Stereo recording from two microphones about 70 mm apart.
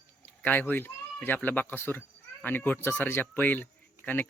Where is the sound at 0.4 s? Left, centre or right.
Left.